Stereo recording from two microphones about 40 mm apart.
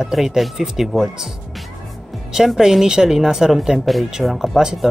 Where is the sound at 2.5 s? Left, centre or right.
Centre.